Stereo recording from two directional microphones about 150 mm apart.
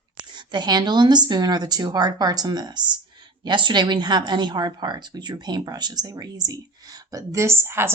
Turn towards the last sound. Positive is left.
turn(degrees=-15)  # may be behind; listen again after turning